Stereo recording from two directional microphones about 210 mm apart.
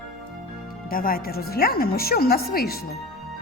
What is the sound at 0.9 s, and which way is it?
A woman's voice, 45° left (ahead or behind).